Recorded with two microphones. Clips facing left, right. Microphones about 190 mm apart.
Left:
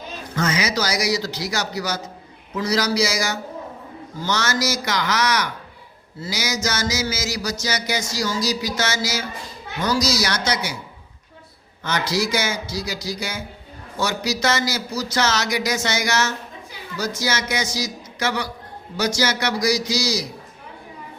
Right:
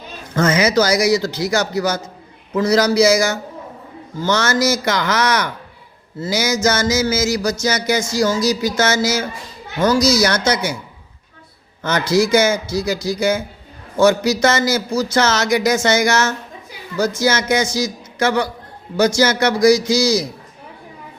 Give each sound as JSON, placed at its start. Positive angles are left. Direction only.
{"t": 0.3, "sound": "a man's voice", "side_deg": -50}
{"t": 11.8, "sound": "a man's voice", "side_deg": -50}